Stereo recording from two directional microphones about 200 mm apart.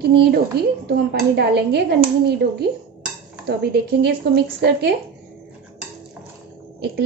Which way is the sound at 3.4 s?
55° right (ahead or behind).